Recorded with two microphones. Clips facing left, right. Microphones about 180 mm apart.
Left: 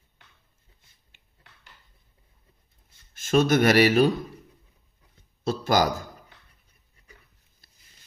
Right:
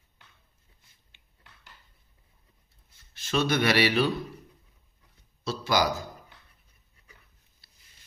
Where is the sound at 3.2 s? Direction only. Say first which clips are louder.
Left 6 dB; 45° left (ahead or behind).